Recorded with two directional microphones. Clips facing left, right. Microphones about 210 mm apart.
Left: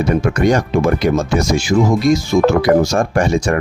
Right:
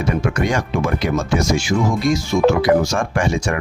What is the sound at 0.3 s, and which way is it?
Speech, 40° left (ahead or behind).